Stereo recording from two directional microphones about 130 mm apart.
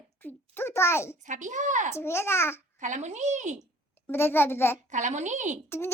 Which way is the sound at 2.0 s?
20° left (ahead or behind).